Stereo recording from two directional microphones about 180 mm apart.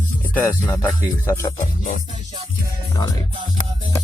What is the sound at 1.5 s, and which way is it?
Music, 45° left (ahead or behind).